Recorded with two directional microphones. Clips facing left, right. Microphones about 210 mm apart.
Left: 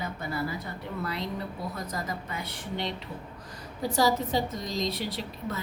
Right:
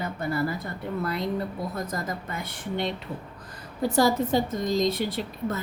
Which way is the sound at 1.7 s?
50° right (ahead or behind).